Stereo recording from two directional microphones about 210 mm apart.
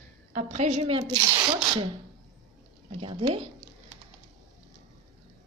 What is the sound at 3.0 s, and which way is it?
Speech, 25° right (ahead or behind).